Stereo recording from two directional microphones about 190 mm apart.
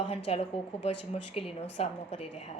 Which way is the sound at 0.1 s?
30° left (ahead or behind).